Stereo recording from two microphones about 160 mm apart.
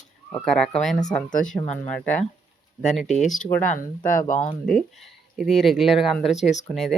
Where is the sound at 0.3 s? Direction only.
5° left (ahead or behind).